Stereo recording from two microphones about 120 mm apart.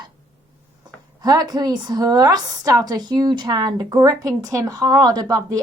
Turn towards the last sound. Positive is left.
turn(degrees=-30)  # may be behind; listen again after turning